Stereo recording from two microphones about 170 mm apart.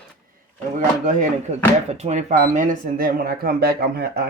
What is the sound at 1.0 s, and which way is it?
Speech, 50° right (ahead or behind).